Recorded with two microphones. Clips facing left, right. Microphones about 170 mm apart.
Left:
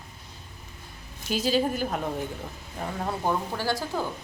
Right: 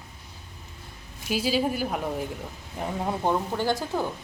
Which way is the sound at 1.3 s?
5° right (ahead or behind).